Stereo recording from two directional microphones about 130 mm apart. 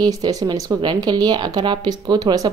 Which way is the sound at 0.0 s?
30° right (ahead or behind).